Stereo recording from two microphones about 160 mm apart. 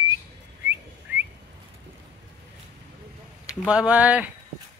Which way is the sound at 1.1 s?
10° right (ahead or behind).